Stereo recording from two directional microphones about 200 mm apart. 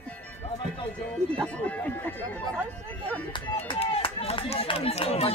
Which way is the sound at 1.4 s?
5° left (ahead or behind).